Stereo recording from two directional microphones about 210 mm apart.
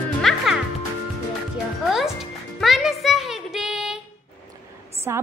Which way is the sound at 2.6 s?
Centre (ahead or behind).